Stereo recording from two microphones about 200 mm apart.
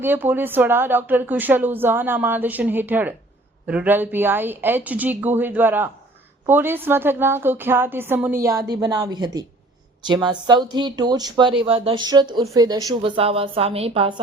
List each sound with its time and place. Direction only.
0.0 s speech: 10° right (ahead or behind); by 14.2 s 25° right (ahead or behind)